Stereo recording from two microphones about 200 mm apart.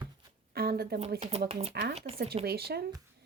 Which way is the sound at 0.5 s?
50° right (ahead or behind).